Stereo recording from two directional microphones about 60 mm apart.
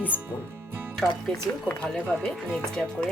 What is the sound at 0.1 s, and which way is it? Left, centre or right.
Speech, left.